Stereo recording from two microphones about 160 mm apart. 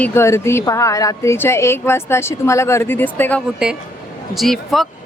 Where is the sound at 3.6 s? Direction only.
5° right (ahead or behind).